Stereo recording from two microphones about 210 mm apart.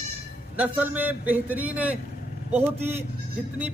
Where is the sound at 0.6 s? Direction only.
10° right (ahead or behind).